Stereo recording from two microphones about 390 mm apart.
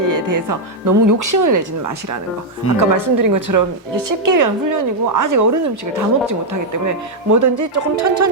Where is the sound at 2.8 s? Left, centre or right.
Right.